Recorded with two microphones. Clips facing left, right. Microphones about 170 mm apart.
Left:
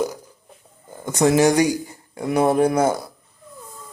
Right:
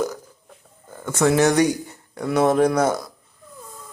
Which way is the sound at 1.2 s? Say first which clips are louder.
Left 1 dB; 15° left (ahead or behind).